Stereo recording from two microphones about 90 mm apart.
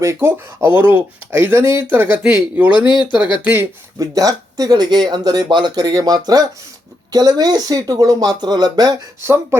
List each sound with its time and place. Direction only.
0.0 s speech: 30° right (ahead or behind); by 3.2 s 15° right (ahead or behind)
3.9 s speech: 40° right (ahead or behind)
9.2 s speech: 30° right (ahead or behind)